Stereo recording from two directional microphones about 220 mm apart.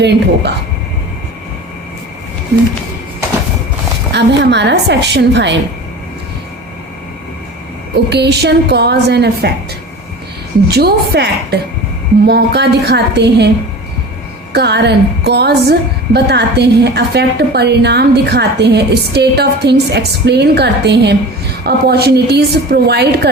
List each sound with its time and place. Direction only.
0.0 s a woman's voice: 50° right (ahead or behind)
4.1 s a woman's voice: 50° right (ahead or behind)
8.1 s a woman's voice: 50° right (ahead or behind)
10.7 s a woman's voice: 45° right (ahead or behind)
14.5 s a woman's voice: 50° right (ahead or behind)